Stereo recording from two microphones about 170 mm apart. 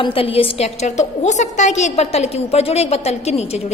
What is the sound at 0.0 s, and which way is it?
A woman's voice, 35° left (ahead or behind).